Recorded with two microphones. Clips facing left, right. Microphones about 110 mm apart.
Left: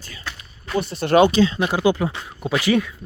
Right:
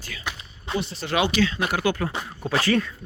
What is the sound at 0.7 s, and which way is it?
Speech, 55° left (ahead or behind).